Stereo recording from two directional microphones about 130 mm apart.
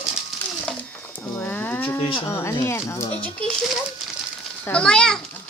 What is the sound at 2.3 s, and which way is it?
Speech, 20° left (ahead or behind).